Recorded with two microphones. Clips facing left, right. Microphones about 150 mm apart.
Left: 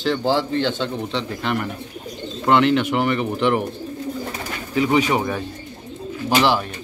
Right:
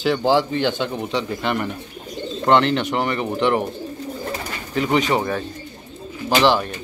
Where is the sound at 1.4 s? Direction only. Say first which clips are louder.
Right 1 dB; centre (ahead or behind).